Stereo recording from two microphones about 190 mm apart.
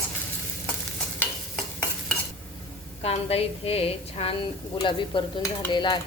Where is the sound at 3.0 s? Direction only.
30° left (ahead or behind).